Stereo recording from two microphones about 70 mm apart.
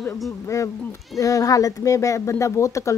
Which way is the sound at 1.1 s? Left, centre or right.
Left.